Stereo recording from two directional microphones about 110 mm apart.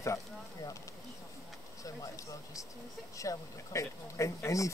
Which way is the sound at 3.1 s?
30° left (ahead or behind).